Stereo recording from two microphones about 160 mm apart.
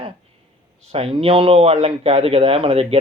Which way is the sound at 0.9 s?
40° right (ahead or behind).